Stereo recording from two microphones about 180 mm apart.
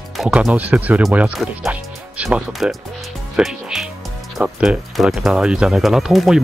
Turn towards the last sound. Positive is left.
turn(degrees=0)  # may be behind; listen again after turning